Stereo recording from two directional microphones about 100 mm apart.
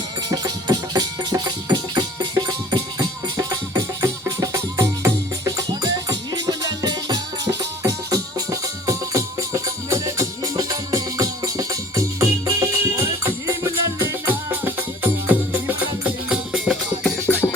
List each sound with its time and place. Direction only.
0.3 s music: 35° right (ahead or behind); by 16.7 s 10° right (ahead or behind)
17.2 s music: 25° left (ahead or behind)